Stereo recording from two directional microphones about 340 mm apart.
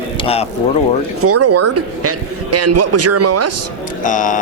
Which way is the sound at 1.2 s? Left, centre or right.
Right.